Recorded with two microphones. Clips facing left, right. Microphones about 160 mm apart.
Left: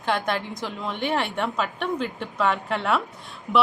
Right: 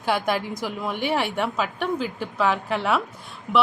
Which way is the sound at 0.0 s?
5° right (ahead or behind).